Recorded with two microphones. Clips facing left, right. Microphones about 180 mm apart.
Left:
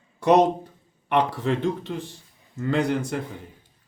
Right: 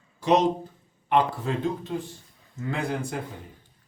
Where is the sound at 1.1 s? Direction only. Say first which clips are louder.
Left 1 dB; 75° left (ahead or behind).